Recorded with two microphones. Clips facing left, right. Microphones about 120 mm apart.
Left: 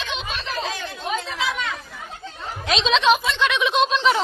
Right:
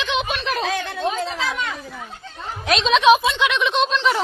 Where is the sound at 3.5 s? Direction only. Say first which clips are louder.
Left 4 dB; centre (ahead or behind).